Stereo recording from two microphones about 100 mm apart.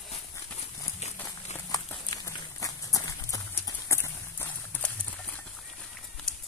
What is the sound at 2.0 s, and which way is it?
Clip-clop, 35° left (ahead or behind).